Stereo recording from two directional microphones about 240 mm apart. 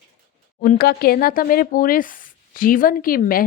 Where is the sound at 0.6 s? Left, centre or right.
Left.